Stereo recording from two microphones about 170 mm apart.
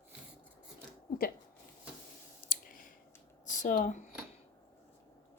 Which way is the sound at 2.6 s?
55° left (ahead or behind).